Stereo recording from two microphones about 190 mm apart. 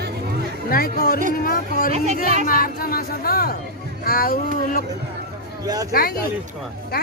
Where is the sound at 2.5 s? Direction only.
50° left (ahead or behind).